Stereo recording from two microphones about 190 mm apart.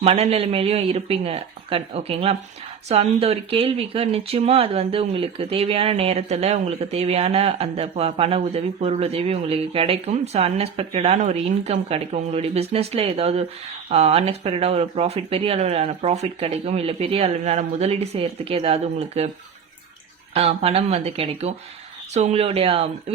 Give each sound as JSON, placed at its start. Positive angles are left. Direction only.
{"t": 0.0, "sound": "speech", "side_deg": -35}
{"t": 20.3, "sound": "speech", "side_deg": -30}